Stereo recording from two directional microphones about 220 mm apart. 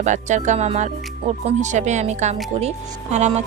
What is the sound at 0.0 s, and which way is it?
Speech, 35° right (ahead or behind).